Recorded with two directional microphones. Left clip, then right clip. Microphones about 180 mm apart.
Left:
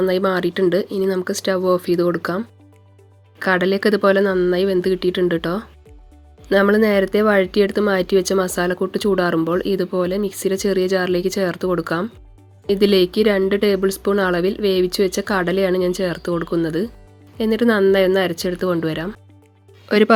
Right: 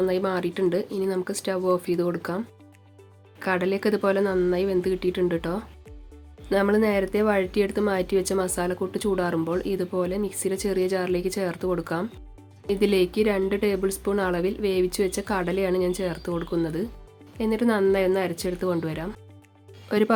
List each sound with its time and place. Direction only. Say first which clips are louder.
0.0 s speech: left 7 dB; 20° left (ahead or behind)